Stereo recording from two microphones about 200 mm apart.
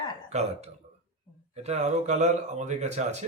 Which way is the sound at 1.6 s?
35° right (ahead or behind).